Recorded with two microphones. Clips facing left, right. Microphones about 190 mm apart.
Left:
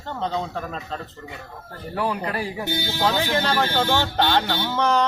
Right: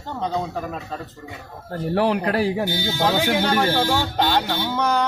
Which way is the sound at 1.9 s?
80° right.